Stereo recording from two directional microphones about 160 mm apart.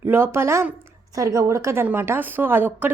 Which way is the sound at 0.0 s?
15° right (ahead or behind).